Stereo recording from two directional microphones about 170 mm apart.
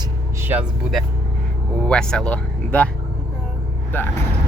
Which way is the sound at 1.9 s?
5° left (ahead or behind).